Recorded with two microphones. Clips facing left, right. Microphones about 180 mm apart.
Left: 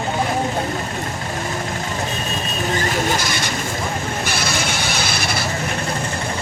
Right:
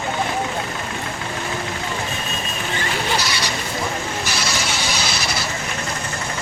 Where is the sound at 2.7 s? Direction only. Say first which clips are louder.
Left 3 dB; 40° left (ahead or behind).